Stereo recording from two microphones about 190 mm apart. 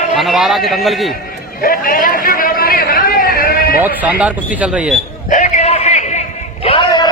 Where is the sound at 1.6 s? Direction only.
50° left (ahead or behind).